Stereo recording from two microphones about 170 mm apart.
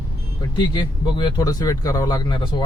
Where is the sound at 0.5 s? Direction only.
25° left (ahead or behind).